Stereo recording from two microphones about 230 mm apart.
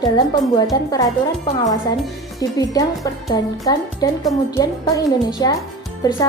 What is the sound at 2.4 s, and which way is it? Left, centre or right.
Speech, centre.